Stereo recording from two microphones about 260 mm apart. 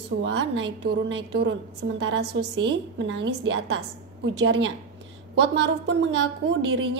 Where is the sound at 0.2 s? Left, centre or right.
Right.